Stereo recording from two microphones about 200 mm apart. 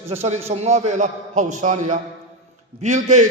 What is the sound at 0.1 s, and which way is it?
A man's voice, 30° right (ahead or behind).